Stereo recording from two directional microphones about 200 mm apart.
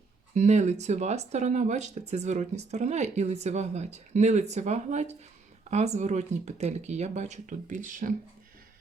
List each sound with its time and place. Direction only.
0.3 s speech: 35° right (ahead or behind)